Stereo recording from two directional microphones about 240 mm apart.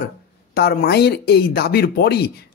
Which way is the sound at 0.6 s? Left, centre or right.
Left.